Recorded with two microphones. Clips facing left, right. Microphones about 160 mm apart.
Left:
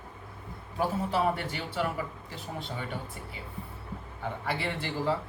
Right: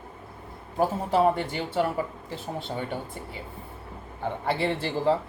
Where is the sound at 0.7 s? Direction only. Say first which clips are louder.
Right 5 dB; 40° right (ahead or behind).